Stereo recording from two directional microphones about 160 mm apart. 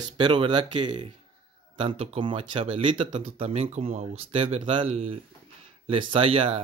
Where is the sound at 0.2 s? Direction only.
30° right (ahead or behind).